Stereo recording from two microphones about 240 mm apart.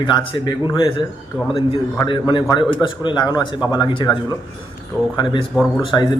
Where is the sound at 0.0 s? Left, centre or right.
Centre.